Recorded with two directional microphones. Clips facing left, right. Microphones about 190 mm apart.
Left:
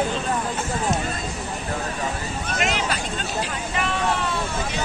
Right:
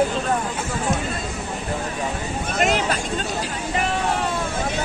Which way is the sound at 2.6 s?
45° right (ahead or behind).